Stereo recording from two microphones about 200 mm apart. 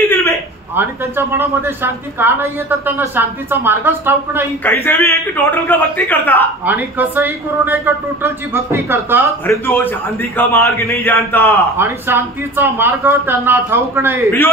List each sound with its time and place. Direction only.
0.1 s a sound: 15° left (ahead or behind)
0.7 s a woman's voice: 10° right (ahead or behind)
4.6 s a man's voice: 10° left (ahead or behind)
6.6 s a woman's voice: 10° right (ahead or behind)
9.5 s a man's voice: 10° left (ahead or behind)
11.7 s a woman's voice: 10° right (ahead or behind)